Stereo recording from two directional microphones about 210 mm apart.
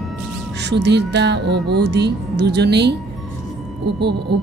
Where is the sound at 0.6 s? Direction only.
55° right (ahead or behind).